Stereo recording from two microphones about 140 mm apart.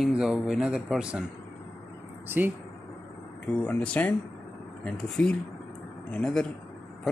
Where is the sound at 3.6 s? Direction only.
10° left (ahead or behind).